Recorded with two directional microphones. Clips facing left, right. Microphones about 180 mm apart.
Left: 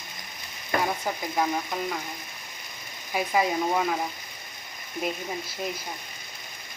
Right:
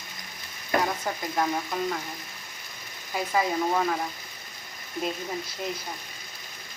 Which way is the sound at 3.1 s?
15° left (ahead or behind).